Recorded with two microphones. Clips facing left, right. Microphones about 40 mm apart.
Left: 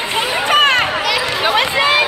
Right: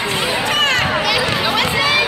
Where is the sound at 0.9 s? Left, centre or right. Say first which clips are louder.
Right 1 dB; centre.